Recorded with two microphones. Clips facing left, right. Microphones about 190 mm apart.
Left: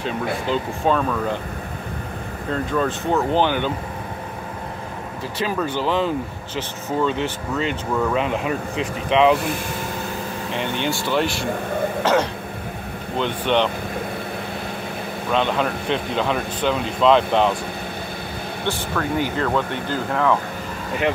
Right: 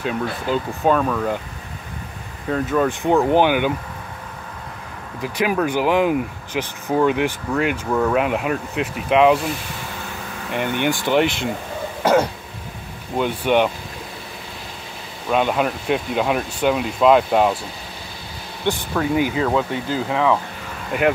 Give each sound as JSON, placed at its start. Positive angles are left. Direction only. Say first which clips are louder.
{"t": 0.0, "sound": "speech", "louder": "even", "side_deg": -5}
{"t": 2.5, "sound": "speech", "louder": "right 3 dB", "side_deg": -5}
{"t": 5.2, "sound": "speech", "louder": "right 4 dB", "side_deg": -15}
{"t": 10.5, "sound": "speech", "louder": "right 4 dB", "side_deg": -10}
{"t": 12.0, "sound": "throat clearing", "louder": "right 4 dB", "side_deg": -10}
{"t": 13.2, "sound": "speech", "louder": "right 2 dB", "side_deg": -10}
{"t": 15.3, "sound": "speech", "louder": "right 2 dB", "side_deg": -5}
{"t": 18.7, "sound": "speech", "louder": "right 4 dB", "side_deg": -10}